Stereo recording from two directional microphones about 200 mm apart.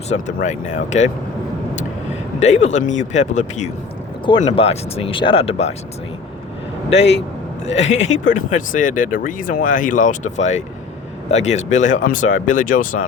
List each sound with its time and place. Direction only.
0.1 s speech: 35° left (ahead or behind)
2.4 s speech: 35° left (ahead or behind)
6.9 s speech: 60° left (ahead or behind)
7.8 s speech: 35° left (ahead or behind)